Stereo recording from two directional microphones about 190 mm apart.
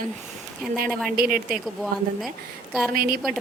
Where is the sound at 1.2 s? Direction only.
5° right (ahead or behind).